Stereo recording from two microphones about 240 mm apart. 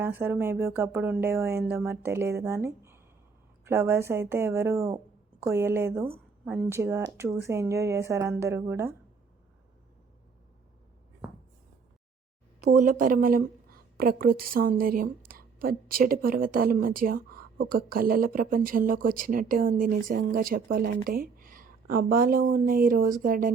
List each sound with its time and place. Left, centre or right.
0.0 s speech: centre
12.5 s a sound: right
12.8 s a woman's voice: right